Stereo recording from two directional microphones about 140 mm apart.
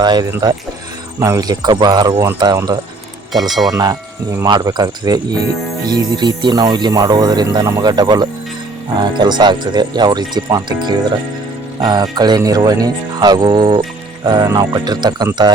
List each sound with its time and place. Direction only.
0.0 s speech: 30° right (ahead or behind)
3.7 s wind chime: 25° right (ahead or behind)
4.4 s speech: 30° right (ahead or behind)